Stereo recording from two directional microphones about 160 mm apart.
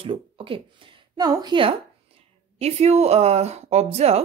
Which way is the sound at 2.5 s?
40° right (ahead or behind).